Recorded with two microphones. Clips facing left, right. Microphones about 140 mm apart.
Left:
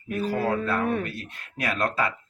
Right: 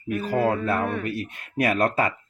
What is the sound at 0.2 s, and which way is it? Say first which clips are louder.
Speech: right 2 dB; 50° right (ahead or behind).